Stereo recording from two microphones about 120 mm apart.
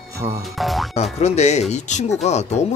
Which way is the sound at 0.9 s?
65° left (ahead or behind).